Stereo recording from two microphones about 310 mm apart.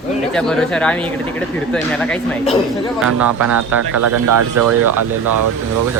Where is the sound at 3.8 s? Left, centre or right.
Right.